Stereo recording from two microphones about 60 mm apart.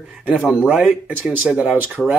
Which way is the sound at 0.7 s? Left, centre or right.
Right.